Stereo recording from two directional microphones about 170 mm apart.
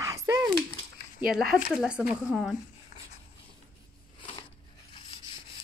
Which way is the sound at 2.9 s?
45° left (ahead or behind).